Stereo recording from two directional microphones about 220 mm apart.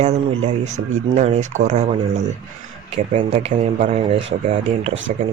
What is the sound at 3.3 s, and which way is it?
Speech, 30° right (ahead or behind).